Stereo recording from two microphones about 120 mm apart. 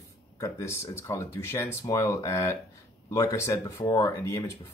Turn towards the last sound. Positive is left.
turn(degrees=25)  # may be behind; listen again after turning